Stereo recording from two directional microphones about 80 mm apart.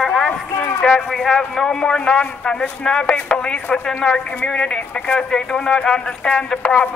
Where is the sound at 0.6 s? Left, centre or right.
Left.